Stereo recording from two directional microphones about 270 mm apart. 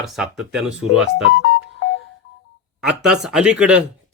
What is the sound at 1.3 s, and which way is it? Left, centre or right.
Music, left.